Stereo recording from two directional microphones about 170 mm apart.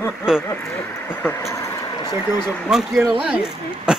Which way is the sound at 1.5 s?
20° left (ahead or behind).